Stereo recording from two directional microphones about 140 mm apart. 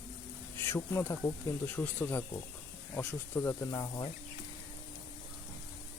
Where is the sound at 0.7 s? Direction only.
15° left (ahead or behind).